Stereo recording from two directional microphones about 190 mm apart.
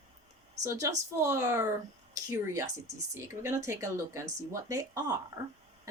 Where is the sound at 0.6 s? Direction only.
15° right (ahead or behind).